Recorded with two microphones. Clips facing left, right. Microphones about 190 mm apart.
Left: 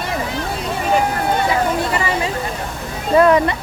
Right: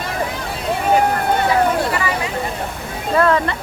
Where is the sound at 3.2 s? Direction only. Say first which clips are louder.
Left 4 dB; 15° left (ahead or behind).